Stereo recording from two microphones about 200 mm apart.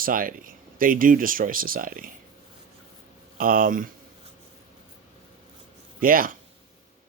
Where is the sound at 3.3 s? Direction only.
45° right (ahead or behind).